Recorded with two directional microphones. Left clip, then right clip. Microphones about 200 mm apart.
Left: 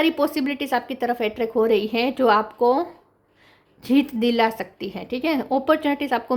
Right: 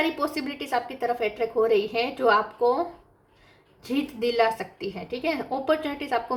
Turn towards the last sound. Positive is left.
turn(degrees=45)  # may be behind; listen again after turning